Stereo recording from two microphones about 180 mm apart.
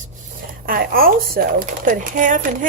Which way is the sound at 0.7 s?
55° right (ahead or behind).